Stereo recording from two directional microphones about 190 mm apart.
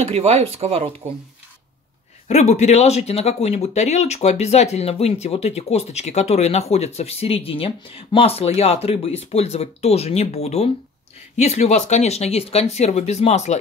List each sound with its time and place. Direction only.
0.1 s speech: 30° right (ahead or behind)
2.2 s speech: 35° left (ahead or behind)